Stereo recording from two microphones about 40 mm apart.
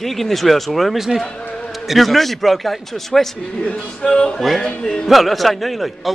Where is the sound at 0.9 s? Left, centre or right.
Centre.